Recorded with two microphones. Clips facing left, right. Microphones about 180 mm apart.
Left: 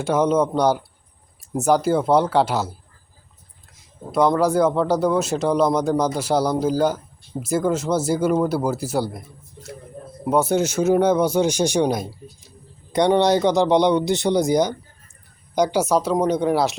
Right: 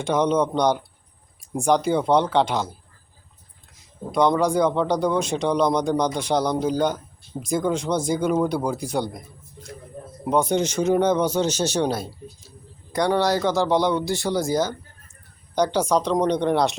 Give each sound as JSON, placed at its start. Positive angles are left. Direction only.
{"t": 0.0, "sound": "speech", "side_deg": 5}
{"t": 4.1, "sound": "speech", "side_deg": 5}
{"t": 10.2, "sound": "speech", "side_deg": 5}